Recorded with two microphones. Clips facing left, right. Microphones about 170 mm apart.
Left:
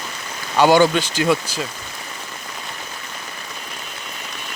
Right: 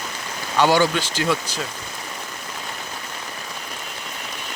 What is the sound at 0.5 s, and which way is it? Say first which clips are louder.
Speech: left 4 dB; 15° left (ahead or behind).